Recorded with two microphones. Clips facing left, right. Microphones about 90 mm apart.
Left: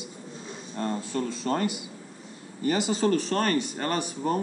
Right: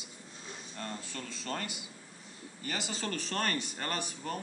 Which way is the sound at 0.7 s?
30° left (ahead or behind).